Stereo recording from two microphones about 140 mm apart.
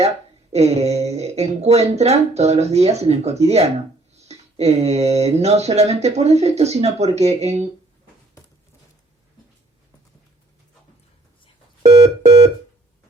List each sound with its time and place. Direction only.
0.5 s speech: 50° right (ahead or behind)
11.8 s telephone: 50° right (ahead or behind)